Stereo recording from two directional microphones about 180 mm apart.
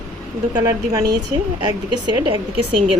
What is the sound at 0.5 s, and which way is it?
A woman's voice, 20° right (ahead or behind).